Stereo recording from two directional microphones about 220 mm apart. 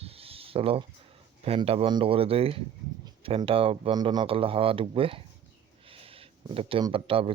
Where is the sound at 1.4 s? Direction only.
25° right (ahead or behind).